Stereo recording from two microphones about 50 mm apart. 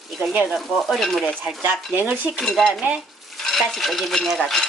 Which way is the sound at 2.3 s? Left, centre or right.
Centre.